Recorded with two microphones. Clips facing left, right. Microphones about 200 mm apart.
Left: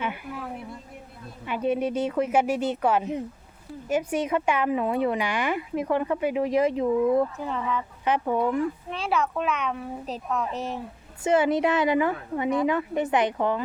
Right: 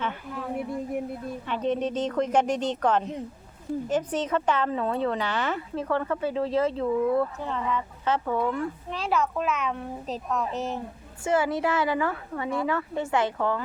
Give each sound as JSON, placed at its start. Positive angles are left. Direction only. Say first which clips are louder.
{"t": 0.0, "sound": "speech", "louder": "even", "side_deg": 10}
{"t": 1.5, "sound": "speech", "louder": "left 2 dB", "side_deg": 10}
{"t": 7.4, "sound": "a child's voice", "louder": "even", "side_deg": 5}
{"t": 8.0, "sound": "speech", "louder": "left 2 dB", "side_deg": 15}
{"t": 8.9, "sound": "a child's voice", "louder": "even", "side_deg": 0}
{"t": 11.2, "sound": "a woman's voice", "louder": "left 3 dB", "side_deg": 20}